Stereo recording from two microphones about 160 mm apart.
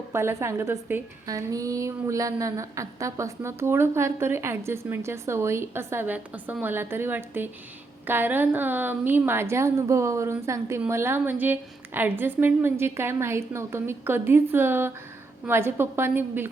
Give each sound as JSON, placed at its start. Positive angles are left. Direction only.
{"t": 0.1, "sound": "a woman's voice", "side_deg": -15}